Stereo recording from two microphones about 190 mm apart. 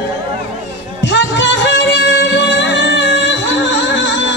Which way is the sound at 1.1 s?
65° left (ahead or behind).